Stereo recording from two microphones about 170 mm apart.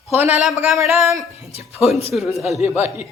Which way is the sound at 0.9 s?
15° right (ahead or behind).